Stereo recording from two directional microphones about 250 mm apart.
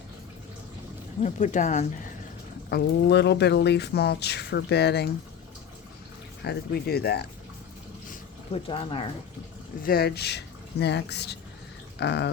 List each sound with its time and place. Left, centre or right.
1.2 s speech: left
2.6 s speech: left
6.4 s speech: left
8.1 s a sound: left
9.8 s speech: left
11.9 s a sound: left